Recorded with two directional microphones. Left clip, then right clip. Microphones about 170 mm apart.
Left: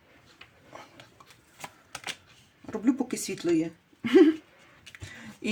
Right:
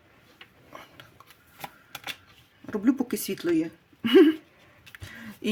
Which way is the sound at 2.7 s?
35° right (ahead or behind).